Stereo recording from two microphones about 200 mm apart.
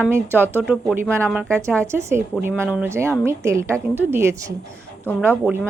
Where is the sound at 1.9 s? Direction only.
15° right (ahead or behind).